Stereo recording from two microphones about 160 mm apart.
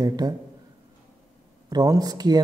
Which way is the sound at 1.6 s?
25° right (ahead or behind).